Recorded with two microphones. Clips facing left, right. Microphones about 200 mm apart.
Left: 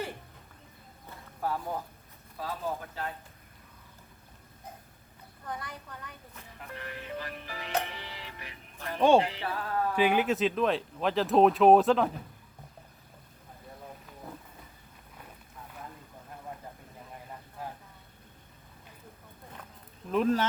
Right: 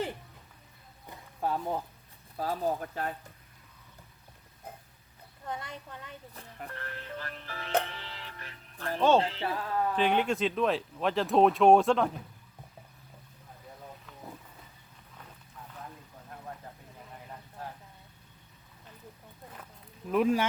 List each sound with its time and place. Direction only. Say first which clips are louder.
1.1 s boat: right 1 dB; 20° right (ahead or behind)
2.4 s speech: right 4 dB; 45° right (ahead or behind)
5.5 s a woman's voice: right 1 dB; 25° right (ahead or behind)
6.7 s speech: left 4 dB; 15° left (ahead or behind)
20.1 s speech: even; 10° right (ahead or behind)